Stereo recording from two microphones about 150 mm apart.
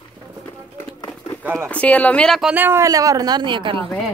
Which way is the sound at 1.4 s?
10° right (ahead or behind).